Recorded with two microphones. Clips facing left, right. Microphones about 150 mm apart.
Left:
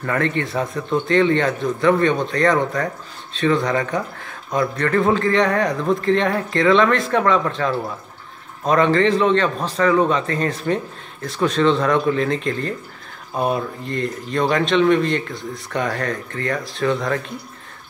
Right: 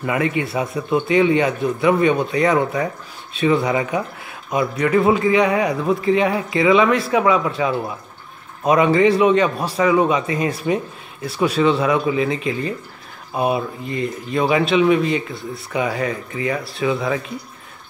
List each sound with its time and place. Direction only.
0.0 s speech: 10° right (ahead or behind)